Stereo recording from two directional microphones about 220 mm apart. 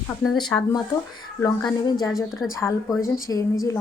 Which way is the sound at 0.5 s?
10° left (ahead or behind).